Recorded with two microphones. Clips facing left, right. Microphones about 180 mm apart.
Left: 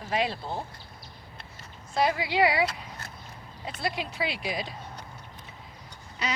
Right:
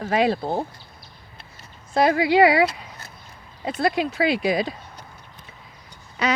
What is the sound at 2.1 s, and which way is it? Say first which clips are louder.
Speech: right 8 dB; 90° right.